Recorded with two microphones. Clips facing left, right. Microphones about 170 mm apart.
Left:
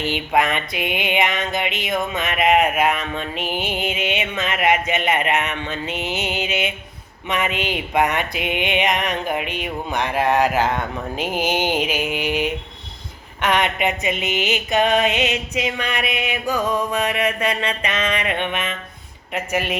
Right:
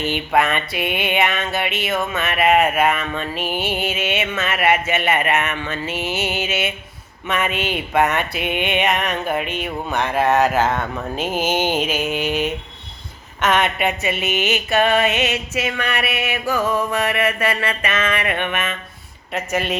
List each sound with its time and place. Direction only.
0.1 s mantra: 15° left (ahead or behind)